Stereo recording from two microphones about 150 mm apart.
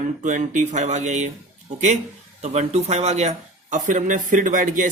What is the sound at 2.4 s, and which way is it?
Speech, 50° right (ahead or behind).